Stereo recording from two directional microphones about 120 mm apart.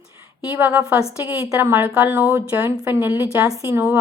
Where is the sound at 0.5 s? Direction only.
15° right (ahead or behind).